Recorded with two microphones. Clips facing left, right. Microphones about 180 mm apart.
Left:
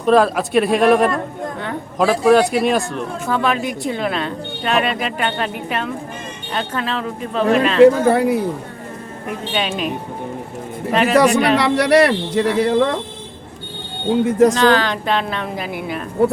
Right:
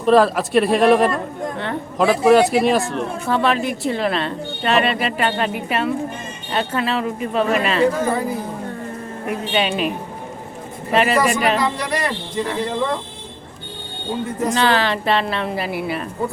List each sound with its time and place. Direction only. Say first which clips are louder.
0.0 s speech: even; centre (ahead or behind)
7.8 s speech: left 7 dB; 70° left (ahead or behind)
9.5 s speech: right 1 dB; 5° right (ahead or behind)
10.9 s speech: left 2 dB; 5° right (ahead or behind)
11.5 s speech: left 8 dB; 75° left (ahead or behind)
14.3 s speech: left 11 dB; 75° left (ahead or behind)
14.5 s speech: left 3 dB; 5° right (ahead or behind)